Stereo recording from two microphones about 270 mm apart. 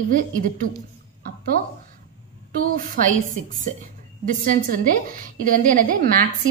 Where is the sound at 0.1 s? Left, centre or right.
Right.